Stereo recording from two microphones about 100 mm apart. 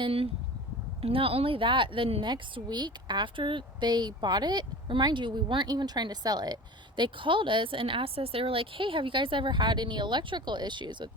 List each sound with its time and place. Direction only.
0.0 s speech: 70° right (ahead or behind)
2.2 s a woman's voice: 45° right (ahead or behind)